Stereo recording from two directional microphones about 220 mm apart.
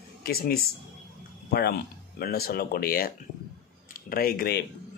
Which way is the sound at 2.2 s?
45° left (ahead or behind).